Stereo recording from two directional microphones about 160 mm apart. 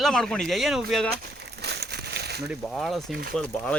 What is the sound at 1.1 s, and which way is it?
Crumpling, 90° right.